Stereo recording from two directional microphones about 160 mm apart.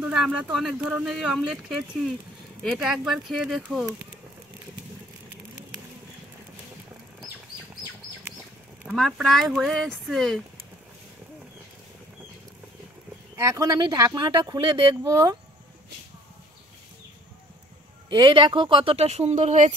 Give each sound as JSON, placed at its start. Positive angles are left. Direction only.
{"t": 0.0, "sound": "speech", "side_deg": -5}
{"t": 8.8, "sound": "speech", "side_deg": 0}
{"t": 13.4, "sound": "speech", "side_deg": -20}
{"t": 18.1, "sound": "speech", "side_deg": -30}